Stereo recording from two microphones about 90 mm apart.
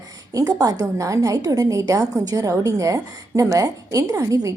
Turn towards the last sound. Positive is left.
turn(degrees=-35)  # may be behind; listen again after turning